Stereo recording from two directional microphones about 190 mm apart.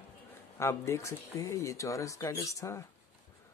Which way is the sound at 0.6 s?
15° left (ahead or behind).